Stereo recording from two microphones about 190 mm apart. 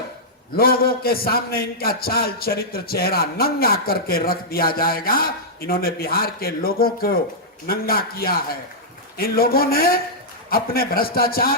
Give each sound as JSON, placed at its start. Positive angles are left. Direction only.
{"t": 0.5, "sound": "a man's voice", "side_deg": 50}